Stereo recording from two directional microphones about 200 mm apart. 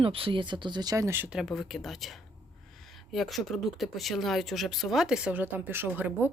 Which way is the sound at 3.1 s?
Centre (ahead or behind).